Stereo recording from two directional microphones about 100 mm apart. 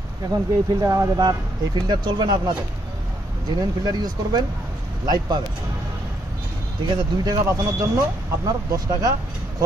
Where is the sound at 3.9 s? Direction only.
45° right (ahead or behind).